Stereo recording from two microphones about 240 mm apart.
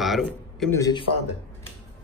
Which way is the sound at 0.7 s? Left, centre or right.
Centre.